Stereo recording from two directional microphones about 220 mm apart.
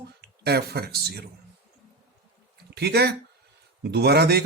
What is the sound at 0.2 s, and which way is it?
Speech, 45° right (ahead or behind).